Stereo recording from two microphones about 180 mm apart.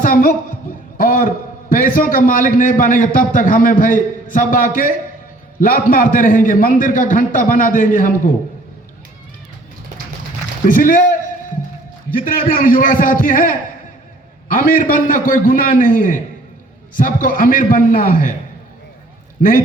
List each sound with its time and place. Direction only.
0.0 s a sound: 50° left (ahead or behind)
0.9 s a man's voice: 50° left (ahead or behind)
10.7 s a man's voice: 50° left (ahead or behind)
12.1 s a man's voice: 50° left (ahead or behind)
19.4 s a man's voice: 50° left (ahead or behind)